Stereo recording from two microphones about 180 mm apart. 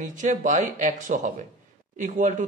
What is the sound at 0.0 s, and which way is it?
Speech, 45° right (ahead or behind).